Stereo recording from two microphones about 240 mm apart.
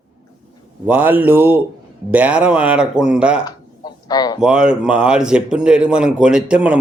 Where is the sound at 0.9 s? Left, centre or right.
Centre.